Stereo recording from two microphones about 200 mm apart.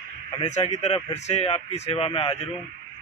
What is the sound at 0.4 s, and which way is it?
A man's voice, 35° left (ahead or behind).